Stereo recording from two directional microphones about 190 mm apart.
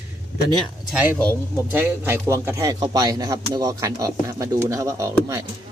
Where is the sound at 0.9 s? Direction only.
5° right (ahead or behind).